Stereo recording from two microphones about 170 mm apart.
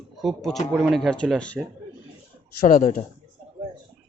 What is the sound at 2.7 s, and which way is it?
Speech, 50° left (ahead or behind).